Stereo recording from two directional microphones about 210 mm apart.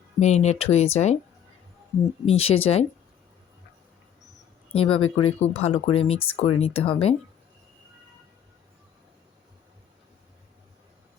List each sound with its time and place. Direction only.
0.2 s speech: 30° left (ahead or behind)
2.2 s speech: 30° left (ahead or behind)
4.7 s speech: 30° left (ahead or behind)